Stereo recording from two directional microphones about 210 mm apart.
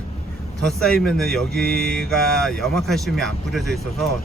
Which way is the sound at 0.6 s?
5° left (ahead or behind).